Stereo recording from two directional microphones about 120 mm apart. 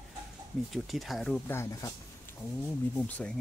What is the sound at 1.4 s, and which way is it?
Speech, 20° left (ahead or behind).